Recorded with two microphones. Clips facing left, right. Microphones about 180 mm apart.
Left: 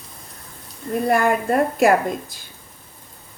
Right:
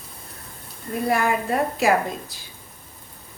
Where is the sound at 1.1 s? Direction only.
55° left (ahead or behind).